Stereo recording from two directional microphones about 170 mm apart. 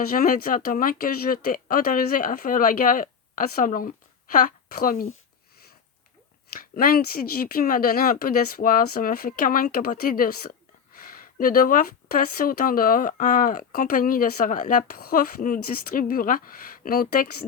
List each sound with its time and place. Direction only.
0.0 s speech: 60° left (ahead or behind)
6.6 s speech: 60° left (ahead or behind)